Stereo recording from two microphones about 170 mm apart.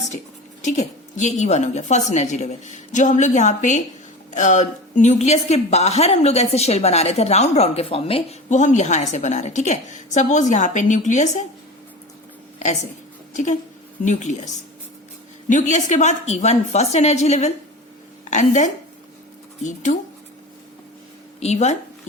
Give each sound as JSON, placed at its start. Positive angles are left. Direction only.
{"t": 0.6, "sound": "a woman's voice", "side_deg": 45}
{"t": 13.3, "sound": "a woman's voice", "side_deg": 45}
{"t": 21.4, "sound": "a woman's voice", "side_deg": 40}